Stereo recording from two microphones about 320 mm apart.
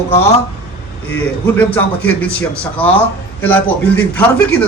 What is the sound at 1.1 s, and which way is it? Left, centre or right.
A man's voice, centre.